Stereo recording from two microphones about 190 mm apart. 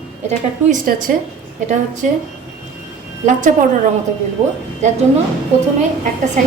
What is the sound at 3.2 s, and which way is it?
Speech, 45° right (ahead or behind).